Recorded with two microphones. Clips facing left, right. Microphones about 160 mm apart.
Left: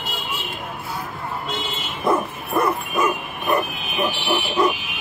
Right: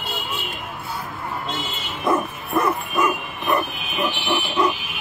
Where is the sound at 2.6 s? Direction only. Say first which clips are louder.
Even; 5° left (ahead or behind).